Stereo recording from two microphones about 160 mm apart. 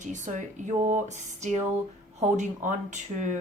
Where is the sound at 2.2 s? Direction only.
50° right (ahead or behind).